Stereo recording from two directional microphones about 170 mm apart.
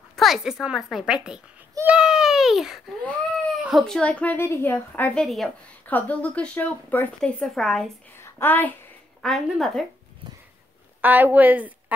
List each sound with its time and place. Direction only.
0.1 s a child's voice: centre (ahead or behind)
1.8 s a sound: 5° right (ahead or behind)
3.6 s a woman's voice: centre (ahead or behind)
8.2 s a child's voice: 10° left (ahead or behind)
11.0 s a woman's voice: 10° right (ahead or behind)